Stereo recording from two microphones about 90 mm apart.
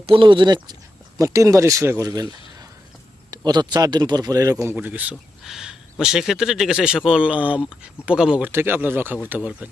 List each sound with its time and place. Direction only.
0.0 s speech: 80° right; by 0.8 s 55° right (ahead or behind)
1.2 s speech: 35° right (ahead or behind)
2.0 s speech: 45° right (ahead or behind)
3.3 s speech: 50° right (ahead or behind)
4.7 s speech: 20° right (ahead or behind)
5.4 s a man's voice: 5° right (ahead or behind)
8.4 s speech: 20° right (ahead or behind)